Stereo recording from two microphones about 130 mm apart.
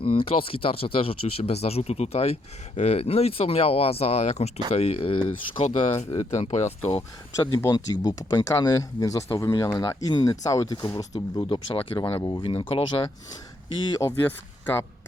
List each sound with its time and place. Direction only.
0.0 s speech: 45° left (ahead or behind)
5.6 s speech: 60° left (ahead or behind)
6.9 s speech: 25° left (ahead or behind); by 13.1 s 45° left (ahead or behind)